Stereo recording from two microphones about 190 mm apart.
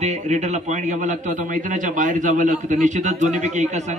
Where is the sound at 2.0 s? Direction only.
45° right (ahead or behind).